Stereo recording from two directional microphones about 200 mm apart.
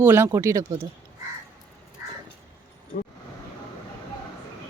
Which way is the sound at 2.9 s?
40° left (ahead or behind).